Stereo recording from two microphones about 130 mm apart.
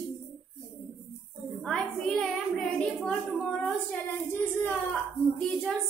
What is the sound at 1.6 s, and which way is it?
A woman's voice, centre (ahead or behind).